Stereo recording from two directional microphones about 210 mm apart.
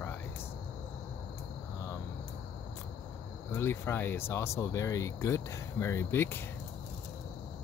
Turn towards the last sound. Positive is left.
turn(degrees=10)  # may be behind; listen again after turning